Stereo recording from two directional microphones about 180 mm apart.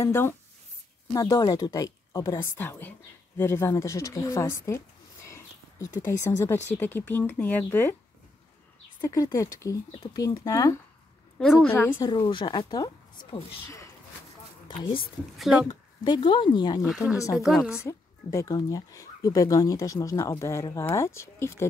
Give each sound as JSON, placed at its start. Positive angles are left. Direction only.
{"t": 0.0, "sound": "a woman's voice", "side_deg": 15}
{"t": 9.0, "sound": "speech", "side_deg": 20}
{"t": 11.3, "sound": "a woman's voice", "side_deg": 5}
{"t": 12.0, "sound": "speech", "side_deg": 25}
{"t": 15.3, "sound": "a woman's voice", "side_deg": 0}
{"t": 15.7, "sound": "speech", "side_deg": 25}
{"t": 16.8, "sound": "a woman's voice", "side_deg": -5}
{"t": 17.8, "sound": "speech", "side_deg": 15}